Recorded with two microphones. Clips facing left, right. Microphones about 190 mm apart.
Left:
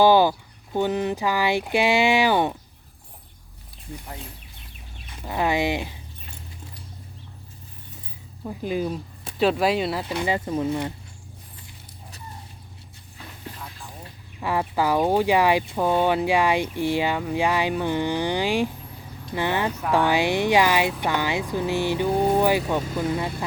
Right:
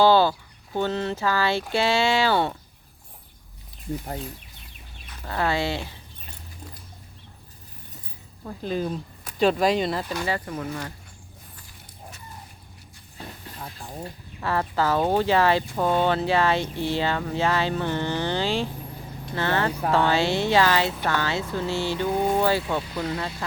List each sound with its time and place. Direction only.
0.0 s speech: 15° left (ahead or behind)
5.1 s speech: 15° left (ahead or behind)
8.4 s speech: 10° left (ahead or behind)
13.6 s vehicle: 40° right (ahead or behind)
14.4 s speech: 15° left (ahead or behind)